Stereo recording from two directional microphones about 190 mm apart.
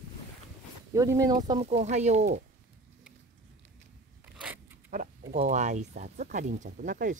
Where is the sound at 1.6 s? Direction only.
35° right (ahead or behind).